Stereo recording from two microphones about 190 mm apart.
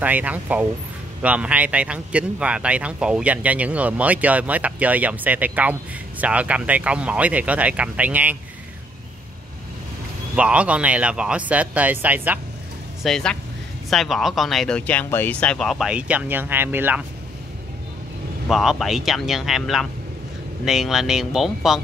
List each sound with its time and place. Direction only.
0.0 s speech: 10° right (ahead or behind)
10.3 s speech: 5° right (ahead or behind)
13.0 s speech: 5° left (ahead or behind)
18.5 s speech: centre (ahead or behind)